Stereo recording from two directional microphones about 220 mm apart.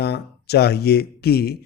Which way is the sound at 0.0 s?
50° left (ahead or behind).